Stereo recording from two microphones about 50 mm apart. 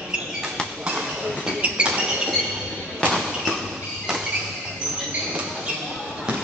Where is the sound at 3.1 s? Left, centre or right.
Centre.